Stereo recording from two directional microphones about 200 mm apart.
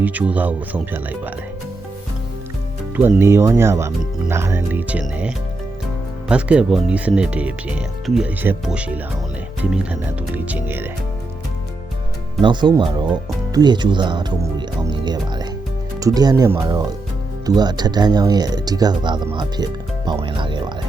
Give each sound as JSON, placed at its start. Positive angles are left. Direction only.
{"t": 0.0, "sound": "speech", "side_deg": -5}
{"t": 3.2, "sound": "speech", "side_deg": -15}
{"t": 12.4, "sound": "speech", "side_deg": -25}
{"t": 15.0, "sound": "music", "side_deg": -20}
{"t": 16.0, "sound": "speech", "side_deg": -15}